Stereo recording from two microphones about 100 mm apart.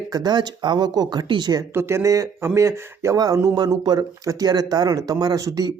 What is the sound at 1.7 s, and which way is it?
Speech, 25° right (ahead or behind).